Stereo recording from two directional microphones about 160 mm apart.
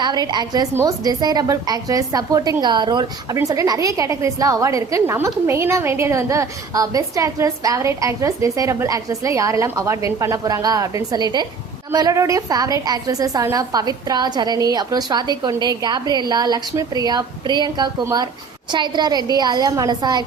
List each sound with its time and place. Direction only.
0.0 s a woman's voice: 25° right (ahead or behind)